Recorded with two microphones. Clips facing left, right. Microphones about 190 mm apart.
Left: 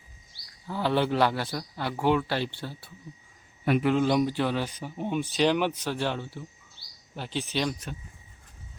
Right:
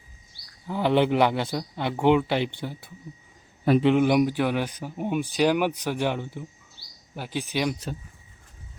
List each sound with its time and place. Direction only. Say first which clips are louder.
0.7 s a man's voice: right 4 dB; 15° right (ahead or behind)